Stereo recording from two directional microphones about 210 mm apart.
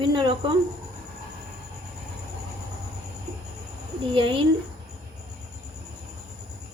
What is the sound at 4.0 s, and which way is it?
Speech, 25° right (ahead or behind).